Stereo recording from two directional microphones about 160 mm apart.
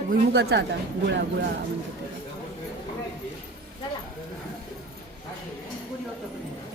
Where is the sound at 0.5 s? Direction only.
90° right.